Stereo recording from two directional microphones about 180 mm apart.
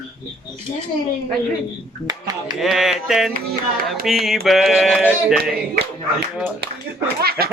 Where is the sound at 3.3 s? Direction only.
50° right (ahead or behind).